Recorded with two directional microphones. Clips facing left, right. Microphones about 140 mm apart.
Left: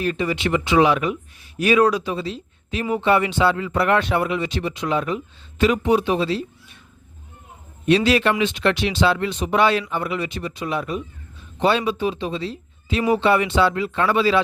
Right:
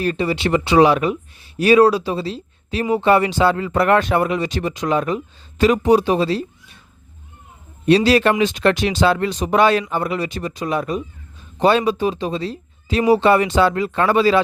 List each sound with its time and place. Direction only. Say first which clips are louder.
0.0 s speech: right 3 dB; 35° right (ahead or behind)
7.9 s speech: right 3 dB; 35° right (ahead or behind)